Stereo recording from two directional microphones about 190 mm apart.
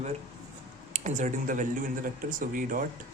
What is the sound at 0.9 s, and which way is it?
Speech, 40° right (ahead or behind).